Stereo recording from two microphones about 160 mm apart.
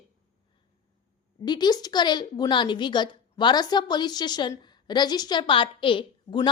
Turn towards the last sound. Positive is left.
turn(degrees=30)  # may be behind; listen again after turning